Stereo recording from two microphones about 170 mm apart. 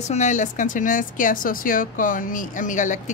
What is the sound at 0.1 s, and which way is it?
A woman's voice, 45° left (ahead or behind).